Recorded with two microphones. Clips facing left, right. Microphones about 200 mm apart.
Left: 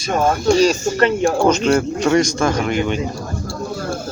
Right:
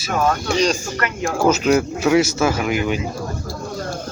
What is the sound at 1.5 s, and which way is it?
Speech, 5° right (ahead or behind).